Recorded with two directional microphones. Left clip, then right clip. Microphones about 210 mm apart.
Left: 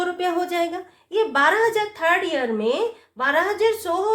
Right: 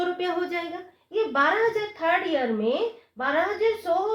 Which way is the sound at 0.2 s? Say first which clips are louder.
Left 4 dB; 30° left (ahead or behind).